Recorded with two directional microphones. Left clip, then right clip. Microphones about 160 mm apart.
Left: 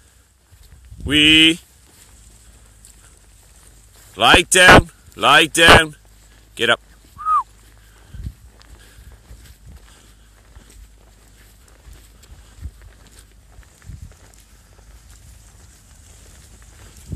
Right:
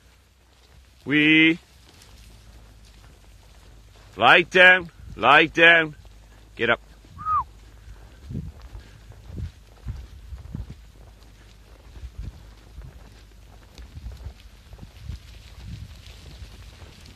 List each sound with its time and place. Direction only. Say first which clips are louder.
1.0 s speech: left 6 dB; 30° left (ahead or behind)
4.1 s speech: left 4 dB; 30° left (ahead or behind)
6.5 s a sound: left 5 dB; 30° left (ahead or behind)